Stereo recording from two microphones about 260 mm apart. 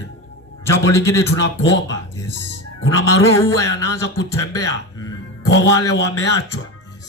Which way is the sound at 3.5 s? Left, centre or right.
Centre.